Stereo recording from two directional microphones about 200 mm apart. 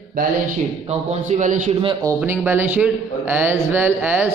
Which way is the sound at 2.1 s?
10° right (ahead or behind).